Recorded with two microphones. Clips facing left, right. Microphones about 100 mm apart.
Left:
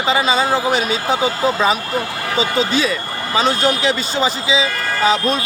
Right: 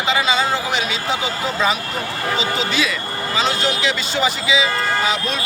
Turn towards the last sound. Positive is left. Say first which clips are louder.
# left 4 dB
turn(degrees=40)  # may be behind; listen again after turning